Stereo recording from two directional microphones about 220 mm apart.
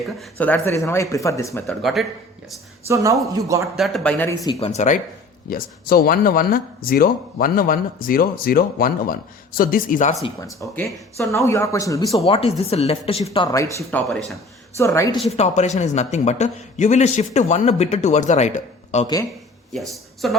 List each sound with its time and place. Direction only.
0.2 s speech: 5° left (ahead or behind)
1.6 s speech: centre (ahead or behind)
2.8 s speech: 15° right (ahead or behind)
3.8 s speech: centre (ahead or behind)
4.4 s speech: 30° left (ahead or behind)
5.5 s speech: 45° left (ahead or behind)
10.6 s speech: 10° left (ahead or behind)
12.2 s speech: 25° left (ahead or behind)
15.4 s speech: 30° left (ahead or behind)
20.2 s speech: centre (ahead or behind)